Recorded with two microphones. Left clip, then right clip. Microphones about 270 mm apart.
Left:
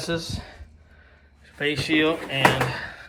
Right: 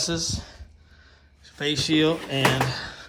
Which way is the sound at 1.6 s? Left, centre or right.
Centre.